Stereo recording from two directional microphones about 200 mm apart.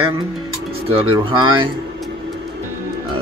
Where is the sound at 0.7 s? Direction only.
25° right (ahead or behind).